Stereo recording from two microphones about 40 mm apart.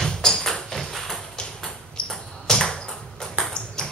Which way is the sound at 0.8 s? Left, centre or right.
Centre.